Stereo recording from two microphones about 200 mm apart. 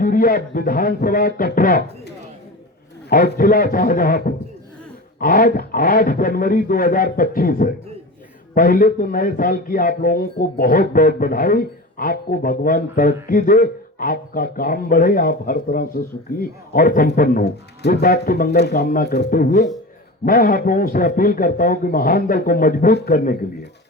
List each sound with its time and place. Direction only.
0.0 s speech: 45° left (ahead or behind)